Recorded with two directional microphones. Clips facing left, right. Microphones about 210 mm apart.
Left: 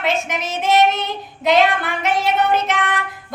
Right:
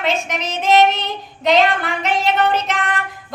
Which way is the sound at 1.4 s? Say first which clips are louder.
Even; centre (ahead or behind).